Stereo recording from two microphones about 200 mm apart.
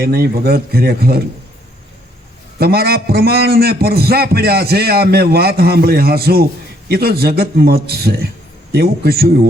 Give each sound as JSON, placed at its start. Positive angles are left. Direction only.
{"t": 0.0, "sound": "a man's voice", "side_deg": -50}
{"t": 2.6, "sound": "a man's voice", "side_deg": -50}